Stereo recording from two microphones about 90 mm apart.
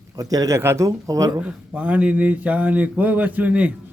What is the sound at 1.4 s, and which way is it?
Speech, 15° right (ahead or behind).